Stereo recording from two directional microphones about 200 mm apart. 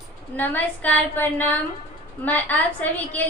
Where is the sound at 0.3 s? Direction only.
10° left (ahead or behind).